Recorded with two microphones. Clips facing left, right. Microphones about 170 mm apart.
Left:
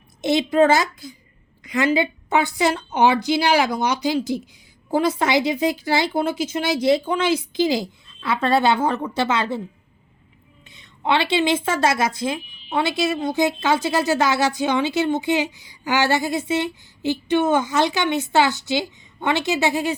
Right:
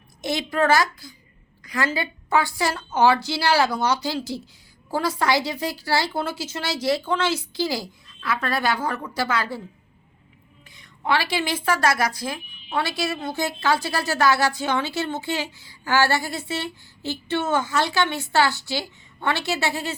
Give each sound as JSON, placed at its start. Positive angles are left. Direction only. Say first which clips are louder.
{"t": 0.2, "sound": "a woman's voice", "louder": "left 7 dB", "side_deg": 20}
{"t": 10.7, "sound": "a woman's voice", "louder": "left 2 dB", "side_deg": 25}